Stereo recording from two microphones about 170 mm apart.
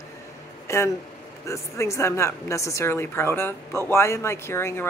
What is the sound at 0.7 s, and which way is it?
A woman's voice, 15° left (ahead or behind).